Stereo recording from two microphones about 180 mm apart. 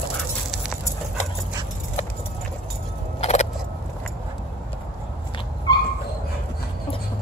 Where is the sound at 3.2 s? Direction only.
40° left (ahead or behind).